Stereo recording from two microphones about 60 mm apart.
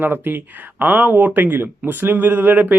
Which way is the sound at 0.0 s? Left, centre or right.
Right.